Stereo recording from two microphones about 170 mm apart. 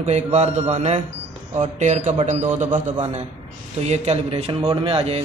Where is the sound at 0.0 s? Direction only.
40° right (ahead or behind).